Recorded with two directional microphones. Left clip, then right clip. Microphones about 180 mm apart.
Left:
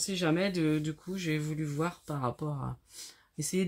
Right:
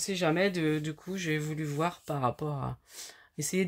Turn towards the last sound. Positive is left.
turn(degrees=-45)  # may be behind; listen again after turning